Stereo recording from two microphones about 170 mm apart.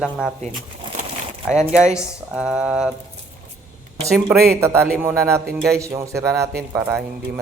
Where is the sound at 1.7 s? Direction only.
5° right (ahead or behind).